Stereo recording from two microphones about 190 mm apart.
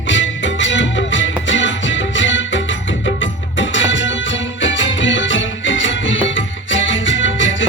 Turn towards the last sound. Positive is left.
turn(degrees=75)  # may be behind; listen again after turning